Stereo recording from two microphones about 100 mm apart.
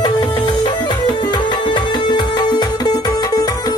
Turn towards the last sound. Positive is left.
turn(degrees=40)  # may be behind; listen again after turning